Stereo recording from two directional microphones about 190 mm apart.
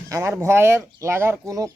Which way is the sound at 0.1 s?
15° right (ahead or behind).